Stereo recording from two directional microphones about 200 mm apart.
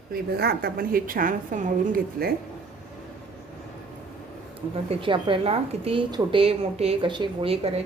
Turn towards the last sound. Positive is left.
turn(degrees=-30)  # may be behind; listen again after turning